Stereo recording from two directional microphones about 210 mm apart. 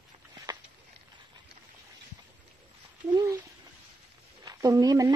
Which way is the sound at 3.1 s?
15° right (ahead or behind).